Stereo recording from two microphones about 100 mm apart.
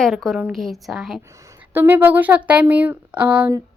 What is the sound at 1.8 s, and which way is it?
Speech, 20° right (ahead or behind).